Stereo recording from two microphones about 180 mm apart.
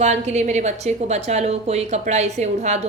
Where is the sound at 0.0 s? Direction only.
40° right (ahead or behind).